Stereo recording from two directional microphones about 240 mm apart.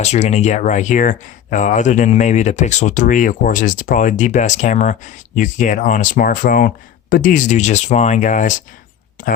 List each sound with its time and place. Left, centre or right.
0.0 s speech: left